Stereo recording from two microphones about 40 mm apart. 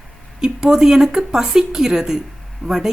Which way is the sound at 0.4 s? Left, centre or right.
Centre.